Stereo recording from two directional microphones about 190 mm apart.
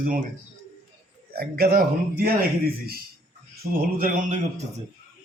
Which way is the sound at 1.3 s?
55° right (ahead or behind).